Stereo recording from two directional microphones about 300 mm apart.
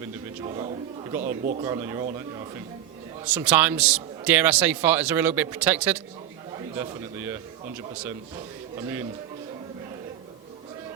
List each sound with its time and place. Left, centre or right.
0.4 s a man's voice: centre
1.6 s a man's voice: centre
3.2 s a man's voice: centre